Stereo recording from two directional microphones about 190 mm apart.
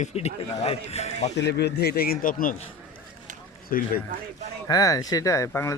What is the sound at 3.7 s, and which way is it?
Speech, 50° left (ahead or behind).